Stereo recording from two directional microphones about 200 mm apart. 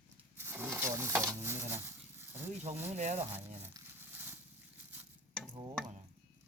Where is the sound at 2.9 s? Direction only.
35° right (ahead or behind).